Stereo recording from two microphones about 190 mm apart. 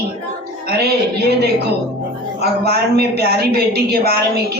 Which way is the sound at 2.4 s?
60° right (ahead or behind).